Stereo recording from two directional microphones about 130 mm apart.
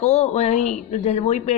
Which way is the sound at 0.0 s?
60° left (ahead or behind).